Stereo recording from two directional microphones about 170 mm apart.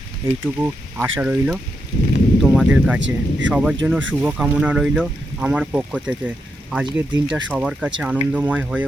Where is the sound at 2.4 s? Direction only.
5° right (ahead or behind).